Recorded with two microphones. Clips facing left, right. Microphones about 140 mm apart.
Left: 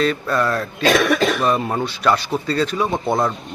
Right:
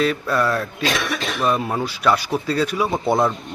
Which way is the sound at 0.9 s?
45° left (ahead or behind).